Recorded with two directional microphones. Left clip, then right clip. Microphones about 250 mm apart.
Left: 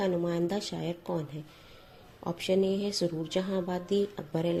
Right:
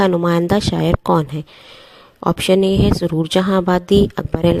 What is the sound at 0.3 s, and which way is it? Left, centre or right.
Speech, right.